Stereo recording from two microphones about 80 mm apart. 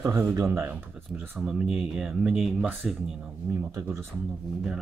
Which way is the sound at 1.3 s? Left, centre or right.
Centre.